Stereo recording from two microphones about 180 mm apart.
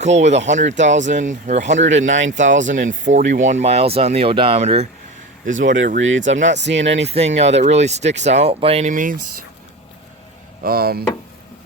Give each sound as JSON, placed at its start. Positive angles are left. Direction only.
{"t": 0.0, "sound": "speech", "side_deg": -40}
{"t": 0.8, "sound": "speech", "side_deg": -90}
{"t": 1.0, "sound": "speech", "side_deg": -45}
{"t": 5.5, "sound": "speech", "side_deg": -90}
{"t": 7.0, "sound": "speech", "side_deg": -35}
{"t": 10.6, "sound": "speech", "side_deg": -55}